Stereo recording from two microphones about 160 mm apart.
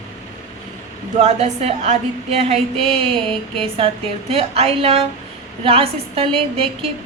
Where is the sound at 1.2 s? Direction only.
45° right (ahead or behind).